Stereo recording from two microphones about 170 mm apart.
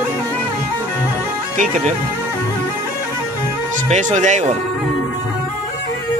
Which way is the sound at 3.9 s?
45° right (ahead or behind).